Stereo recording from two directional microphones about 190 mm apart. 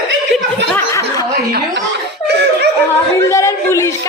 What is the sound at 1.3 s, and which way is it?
Speech, 55° right (ahead or behind).